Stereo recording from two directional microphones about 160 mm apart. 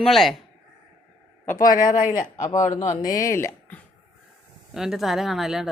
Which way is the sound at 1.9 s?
55° left (ahead or behind).